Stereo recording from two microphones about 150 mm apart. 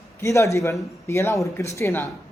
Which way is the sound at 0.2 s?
20° left (ahead or behind).